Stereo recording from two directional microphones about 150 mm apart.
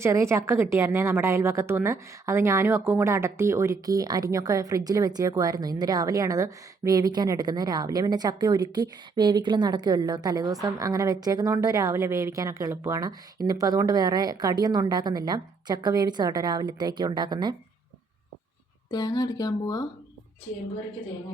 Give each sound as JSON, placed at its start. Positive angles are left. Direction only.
{"t": 0.0, "sound": "a woman's voice", "side_deg": -20}
{"t": 18.9, "sound": "speech", "side_deg": 25}